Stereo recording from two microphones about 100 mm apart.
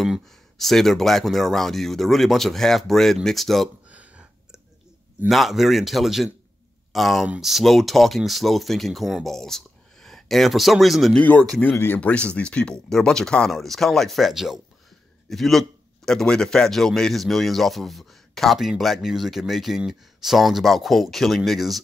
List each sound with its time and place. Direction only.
0.0 s speech: centre (ahead or behind)
3.9 s a sound: 15° right (ahead or behind)
5.3 s speech: centre (ahead or behind)
11.1 s speech: 15° left (ahead or behind)
11.7 s speech: 25° left (ahead or behind)
12.0 s speech: 10° left (ahead or behind)